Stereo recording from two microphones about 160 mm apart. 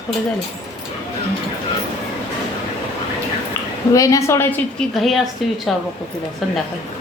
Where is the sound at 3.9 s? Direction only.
20° left (ahead or behind).